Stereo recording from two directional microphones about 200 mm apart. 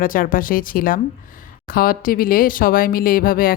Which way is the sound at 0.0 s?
45° left (ahead or behind).